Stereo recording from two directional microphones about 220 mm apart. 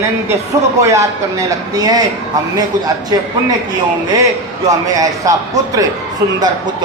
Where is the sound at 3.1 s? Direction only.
15° right (ahead or behind).